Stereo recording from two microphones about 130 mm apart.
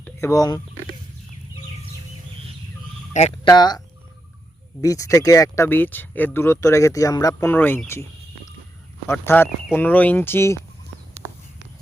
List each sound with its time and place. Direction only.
0.2 s speech: 25° left (ahead or behind)
3.1 s speech: 60° left (ahead or behind)
3.4 s speech: 35° left (ahead or behind)
5.6 s speech: 15° left (ahead or behind)
9.1 s speech: 15° left (ahead or behind)